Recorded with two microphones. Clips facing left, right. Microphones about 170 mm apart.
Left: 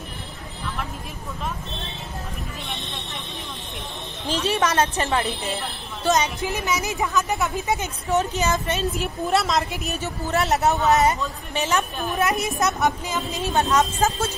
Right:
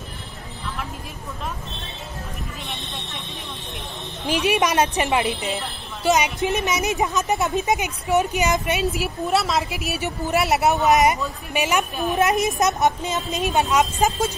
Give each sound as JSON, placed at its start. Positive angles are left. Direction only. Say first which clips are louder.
{"t": 4.3, "sound": "speech", "louder": "right 2 dB", "side_deg": -10}
{"t": 9.9, "sound": "speech", "louder": "right 2 dB", "side_deg": -15}